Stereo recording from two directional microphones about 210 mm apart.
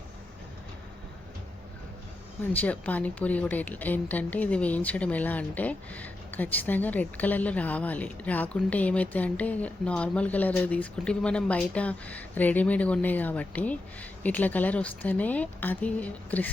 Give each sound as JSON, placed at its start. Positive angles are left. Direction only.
{"t": 2.4, "sound": "a woman's voice", "side_deg": 10}